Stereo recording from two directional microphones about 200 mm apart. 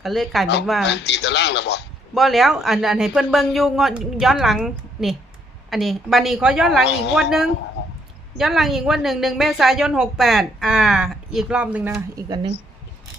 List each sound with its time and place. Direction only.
0.0 s a woman's voice: centre (ahead or behind)
0.9 s speech: 60° left (ahead or behind)
2.1 s a woman's voice: centre (ahead or behind)